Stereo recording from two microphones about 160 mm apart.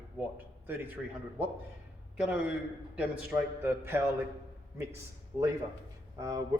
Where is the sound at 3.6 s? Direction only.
15° right (ahead or behind).